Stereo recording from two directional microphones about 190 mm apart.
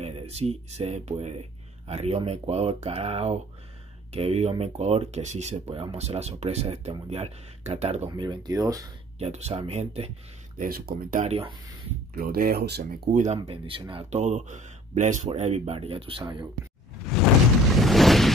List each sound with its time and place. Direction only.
0.0 s speech: 35° right (ahead or behind)
8.1 s speech: 20° right (ahead or behind)
9.2 s speech: 35° right (ahead or behind)
10.6 s speech: 50° right (ahead or behind); by 11.5 s 35° right (ahead or behind)
12.1 s speech: 55° right (ahead or behind)
13.1 s speech: 40° right (ahead or behind)
17.7 s a sound: centre (ahead or behind)